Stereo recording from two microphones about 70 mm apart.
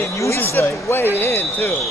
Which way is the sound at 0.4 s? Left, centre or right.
Left.